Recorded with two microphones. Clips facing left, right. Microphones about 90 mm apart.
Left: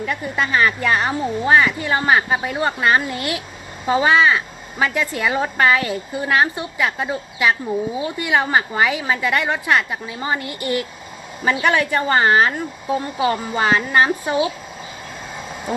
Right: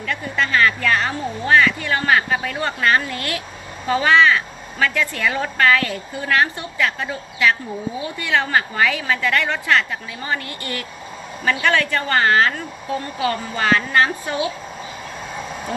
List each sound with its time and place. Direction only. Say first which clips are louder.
0.0 s a woman's voice: left 1 dB; 20° left (ahead or behind)